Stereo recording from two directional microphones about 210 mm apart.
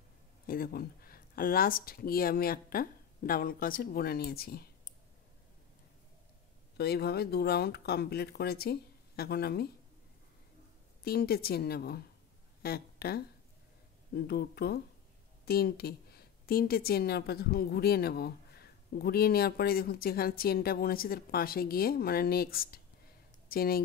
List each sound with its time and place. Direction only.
0.5 s a woman's voice: 45° left (ahead or behind)
6.8 s a woman's voice: 50° left (ahead or behind)
11.1 s a woman's voice: 45° left (ahead or behind)